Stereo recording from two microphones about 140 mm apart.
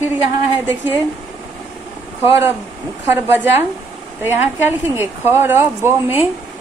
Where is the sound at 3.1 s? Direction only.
15° right (ahead or behind).